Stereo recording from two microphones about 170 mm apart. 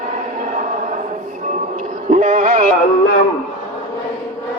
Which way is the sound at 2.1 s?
45° right (ahead or behind).